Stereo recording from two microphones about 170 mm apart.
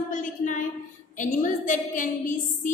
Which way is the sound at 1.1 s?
50° left (ahead or behind).